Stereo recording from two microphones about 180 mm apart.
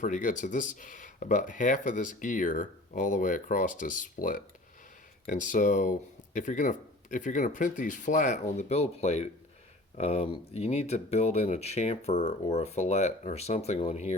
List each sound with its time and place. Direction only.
0.0 s speech: 45° left (ahead or behind)